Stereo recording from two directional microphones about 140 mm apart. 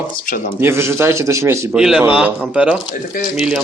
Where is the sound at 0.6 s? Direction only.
20° right (ahead or behind).